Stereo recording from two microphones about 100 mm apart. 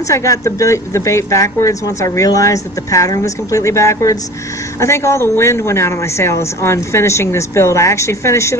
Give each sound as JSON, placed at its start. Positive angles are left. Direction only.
{"t": 0.1, "sound": "speech", "side_deg": 30}